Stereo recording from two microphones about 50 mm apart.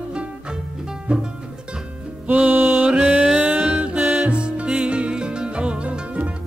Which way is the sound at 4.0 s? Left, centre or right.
Right.